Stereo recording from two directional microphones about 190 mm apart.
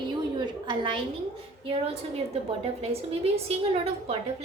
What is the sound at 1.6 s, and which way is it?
A woman's voice, 30° right (ahead or behind).